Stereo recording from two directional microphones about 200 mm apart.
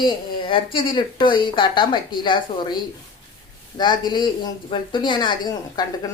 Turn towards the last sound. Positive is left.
turn(degrees=20)  # may be behind; listen again after turning